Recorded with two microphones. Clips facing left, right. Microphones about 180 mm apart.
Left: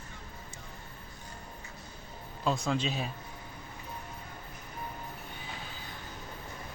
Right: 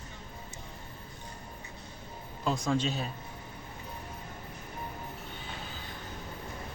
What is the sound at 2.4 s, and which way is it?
Speech, centre (ahead or behind).